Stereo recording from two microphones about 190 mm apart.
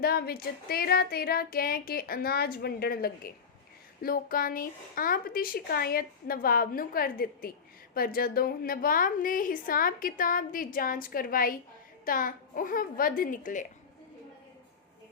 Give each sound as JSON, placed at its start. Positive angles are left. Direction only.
{"t": 0.0, "sound": "a woman's voice", "side_deg": 55}